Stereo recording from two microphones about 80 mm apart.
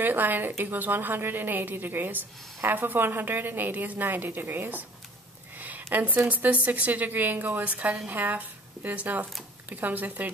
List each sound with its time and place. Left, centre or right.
0.0 s a woman's voice: right
5.6 s a sound: right
5.9 s a woman's voice: right